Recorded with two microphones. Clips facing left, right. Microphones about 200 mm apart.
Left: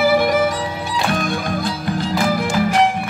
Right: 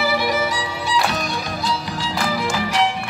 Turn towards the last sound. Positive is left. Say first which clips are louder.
# left 5 dB
turn(degrees=50)  # may be behind; listen again after turning